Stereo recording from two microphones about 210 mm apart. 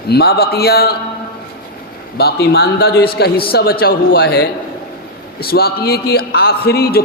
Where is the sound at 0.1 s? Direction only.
50° left (ahead or behind).